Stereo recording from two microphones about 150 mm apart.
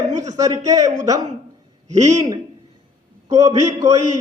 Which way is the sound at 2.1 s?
25° right (ahead or behind).